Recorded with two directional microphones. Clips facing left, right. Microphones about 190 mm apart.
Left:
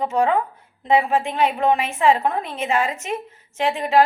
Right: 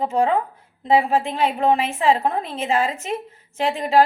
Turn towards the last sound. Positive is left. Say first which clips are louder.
# even
turn(degrees=-35)  # may be behind; listen again after turning